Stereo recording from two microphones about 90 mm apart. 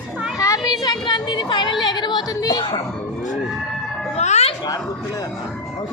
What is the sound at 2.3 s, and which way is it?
Speech, 40° left (ahead or behind).